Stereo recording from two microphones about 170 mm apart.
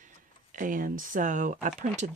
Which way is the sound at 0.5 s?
50° right (ahead or behind).